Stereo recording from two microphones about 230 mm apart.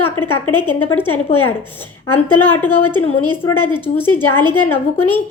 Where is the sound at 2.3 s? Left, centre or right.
Centre.